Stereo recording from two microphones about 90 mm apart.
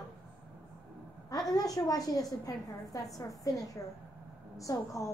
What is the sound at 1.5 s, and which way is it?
A woman's voice, 45° left (ahead or behind).